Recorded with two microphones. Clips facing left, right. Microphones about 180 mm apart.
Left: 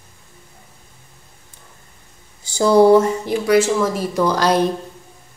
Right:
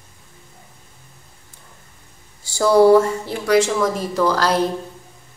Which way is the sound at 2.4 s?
20° left (ahead or behind).